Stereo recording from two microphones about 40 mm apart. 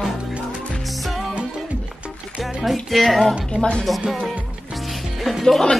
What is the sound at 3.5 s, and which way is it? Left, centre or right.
Speech, left.